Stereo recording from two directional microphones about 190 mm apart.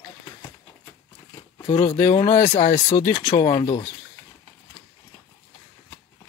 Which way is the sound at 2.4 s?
30° left (ahead or behind).